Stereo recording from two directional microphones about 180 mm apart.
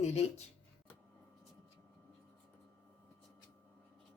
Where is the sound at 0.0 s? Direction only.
35° left (ahead or behind).